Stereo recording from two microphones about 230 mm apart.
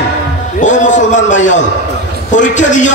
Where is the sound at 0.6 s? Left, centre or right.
Left.